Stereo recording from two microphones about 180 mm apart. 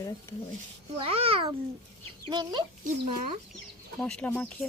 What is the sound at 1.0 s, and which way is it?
A child's voice, 30° right (ahead or behind).